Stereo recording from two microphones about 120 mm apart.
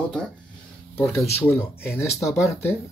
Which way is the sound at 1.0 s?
20° left (ahead or behind).